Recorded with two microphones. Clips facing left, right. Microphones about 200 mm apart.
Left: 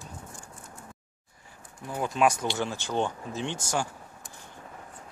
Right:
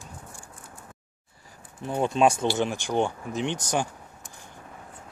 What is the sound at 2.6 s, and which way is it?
Speech, 15° right (ahead or behind).